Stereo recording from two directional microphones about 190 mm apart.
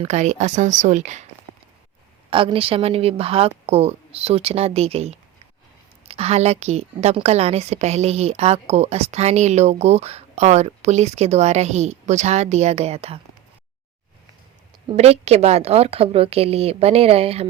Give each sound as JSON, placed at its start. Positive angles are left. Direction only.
{"t": 0.0, "sound": "a woman's voice", "side_deg": -35}
{"t": 2.3, "sound": "a woman's voice", "side_deg": -30}
{"t": 14.8, "sound": "a woman's voice", "side_deg": -35}